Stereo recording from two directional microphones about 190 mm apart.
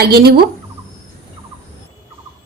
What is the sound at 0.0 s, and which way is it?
Speech, 55° right (ahead or behind).